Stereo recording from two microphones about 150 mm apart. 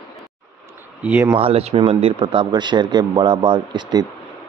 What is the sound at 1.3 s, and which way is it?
Speech, 40° right (ahead or behind).